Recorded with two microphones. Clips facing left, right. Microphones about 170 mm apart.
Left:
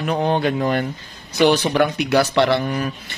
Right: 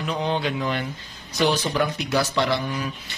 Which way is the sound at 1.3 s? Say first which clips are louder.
Left 6 dB; 65° left (ahead or behind).